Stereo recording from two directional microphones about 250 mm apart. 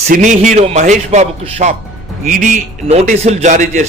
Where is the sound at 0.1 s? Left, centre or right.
Right.